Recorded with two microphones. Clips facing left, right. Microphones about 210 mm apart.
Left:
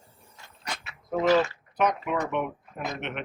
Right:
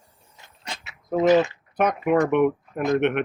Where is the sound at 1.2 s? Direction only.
20° right (ahead or behind).